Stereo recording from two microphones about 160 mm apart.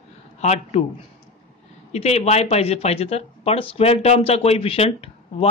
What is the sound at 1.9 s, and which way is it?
Speech, 40° left (ahead or behind).